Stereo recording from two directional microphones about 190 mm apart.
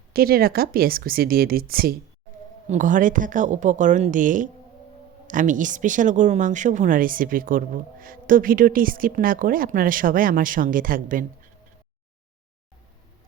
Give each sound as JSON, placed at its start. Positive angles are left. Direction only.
{"t": 0.1, "sound": "speech", "side_deg": -50}